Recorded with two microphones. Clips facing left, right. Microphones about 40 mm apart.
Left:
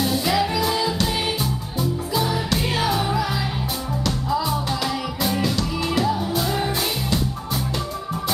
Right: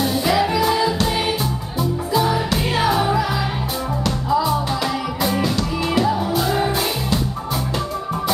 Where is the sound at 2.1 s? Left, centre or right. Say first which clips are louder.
Right 6 dB; centre.